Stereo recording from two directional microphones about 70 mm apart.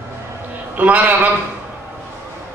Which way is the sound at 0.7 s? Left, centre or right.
Right.